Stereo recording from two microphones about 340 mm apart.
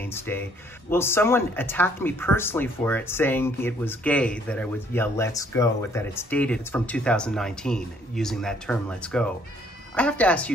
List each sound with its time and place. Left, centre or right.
0.0 s speech: centre